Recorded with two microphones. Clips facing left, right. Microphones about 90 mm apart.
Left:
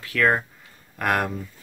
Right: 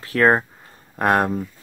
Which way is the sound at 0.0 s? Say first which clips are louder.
Right 5 dB; 35° right (ahead or behind).